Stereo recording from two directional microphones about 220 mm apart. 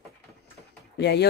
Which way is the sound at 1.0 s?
50° left (ahead or behind).